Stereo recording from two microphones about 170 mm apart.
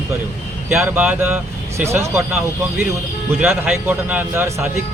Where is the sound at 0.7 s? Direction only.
5° right (ahead or behind).